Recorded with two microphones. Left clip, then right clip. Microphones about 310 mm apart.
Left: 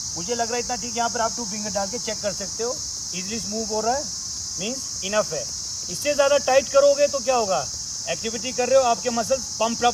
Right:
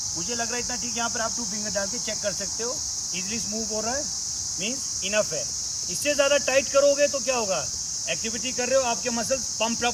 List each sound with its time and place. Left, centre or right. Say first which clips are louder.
0.3 s speech: left 6 dB; left
3.8 s speech: left 7 dB; centre
6.1 s speech: left 3 dB; centre